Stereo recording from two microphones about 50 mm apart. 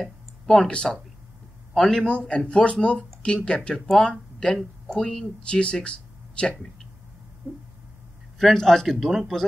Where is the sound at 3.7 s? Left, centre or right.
Centre; by 6.5 s left.